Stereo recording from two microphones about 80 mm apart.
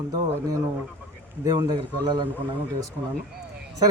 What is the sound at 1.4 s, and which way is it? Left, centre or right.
Speech, right.